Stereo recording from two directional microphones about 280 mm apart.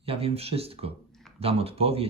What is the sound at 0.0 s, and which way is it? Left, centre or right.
Speech, right.